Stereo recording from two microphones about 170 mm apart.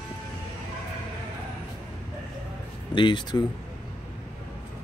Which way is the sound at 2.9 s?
30° left (ahead or behind).